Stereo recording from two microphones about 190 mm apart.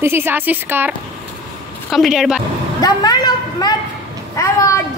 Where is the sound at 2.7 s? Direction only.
20° left (ahead or behind).